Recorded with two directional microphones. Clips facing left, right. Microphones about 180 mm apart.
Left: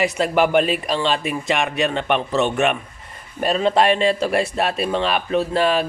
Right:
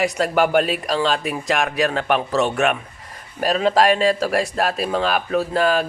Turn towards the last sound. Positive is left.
turn(degrees=0)  # may be behind; listen again after turning